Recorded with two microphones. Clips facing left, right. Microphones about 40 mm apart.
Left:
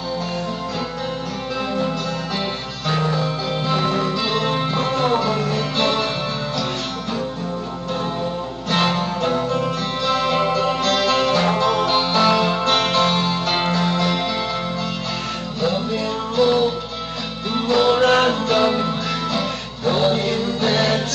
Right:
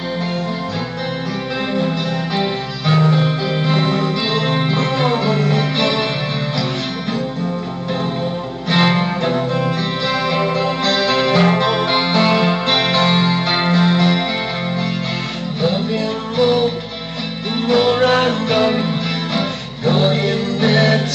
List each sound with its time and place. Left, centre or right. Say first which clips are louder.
3.1 s music: right 5 dB; right
8.6 s music: right 4 dB; right
16.3 s music: right 2 dB; right